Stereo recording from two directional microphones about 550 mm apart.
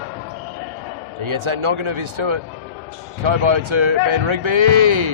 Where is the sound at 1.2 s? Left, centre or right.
Right.